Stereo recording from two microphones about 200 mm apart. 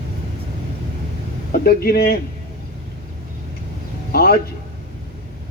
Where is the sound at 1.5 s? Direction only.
50° left (ahead or behind).